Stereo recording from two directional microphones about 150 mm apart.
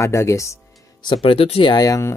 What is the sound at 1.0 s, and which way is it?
Speech, 35° left (ahead or behind).